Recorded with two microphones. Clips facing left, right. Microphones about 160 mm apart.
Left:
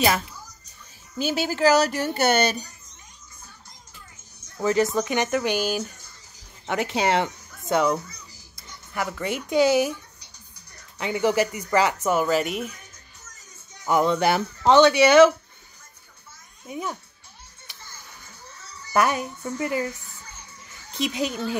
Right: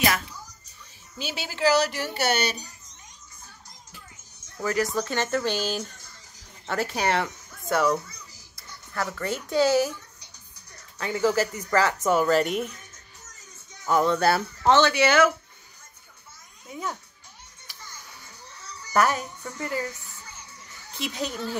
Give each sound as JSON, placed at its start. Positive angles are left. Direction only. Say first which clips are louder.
{"t": 1.1, "sound": "speech", "louder": "left 9 dB", "side_deg": 45}
{"t": 4.6, "sound": "a woman's voice", "louder": "left 4 dB", "side_deg": 25}
{"t": 11.0, "sound": "speech", "louder": "left 2 dB", "side_deg": 15}
{"t": 13.8, "sound": "speech", "louder": "left 1 dB", "side_deg": 15}
{"t": 16.6, "sound": "a child's voice", "louder": "left 2 dB", "side_deg": 15}
{"t": 18.9, "sound": "speech", "louder": "left 1 dB", "side_deg": 15}
{"t": 20.9, "sound": "speech", "louder": "left 5 dB", "side_deg": 15}